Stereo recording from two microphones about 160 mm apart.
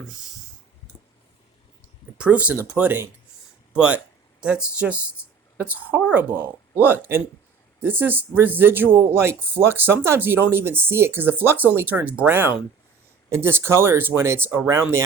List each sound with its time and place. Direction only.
2.1 s speech: 5° right (ahead or behind)